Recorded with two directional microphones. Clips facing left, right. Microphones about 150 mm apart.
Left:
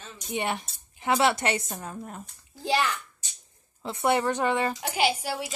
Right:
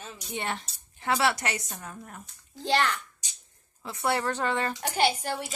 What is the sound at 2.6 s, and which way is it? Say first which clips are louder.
Speech: even; 10° left (ahead or behind).